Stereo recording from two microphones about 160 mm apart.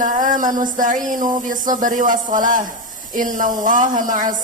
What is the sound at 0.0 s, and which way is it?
Speech, 55° right (ahead or behind).